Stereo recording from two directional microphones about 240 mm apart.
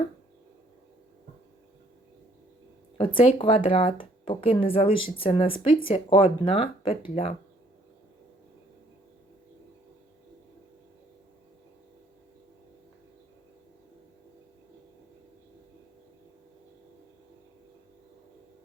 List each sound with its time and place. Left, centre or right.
3.0 s speech: left
5.7 s speech: left
6.1 s speech: left